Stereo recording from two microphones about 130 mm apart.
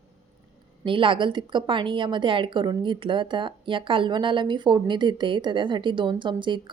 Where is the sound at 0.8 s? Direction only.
40° right (ahead or behind).